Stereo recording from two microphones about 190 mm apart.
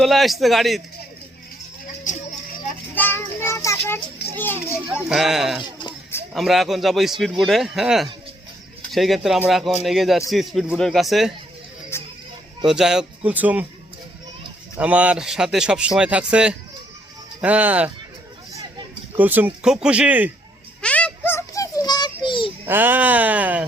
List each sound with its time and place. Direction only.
0.0 s speech: centre (ahead or behind)
2.9 s child singing: 10° left (ahead or behind)
4.2 s children playing: 60° left (ahead or behind)
5.0 s speech: centre (ahead or behind)
12.6 s speech: 5° right (ahead or behind)
14.8 s speech: 5° right (ahead or behind)
19.1 s speech: 10° right (ahead or behind)
20.8 s child singing: 5° left (ahead or behind); by 22.5 s 25° left (ahead or behind)
22.6 s speech: 10° right (ahead or behind)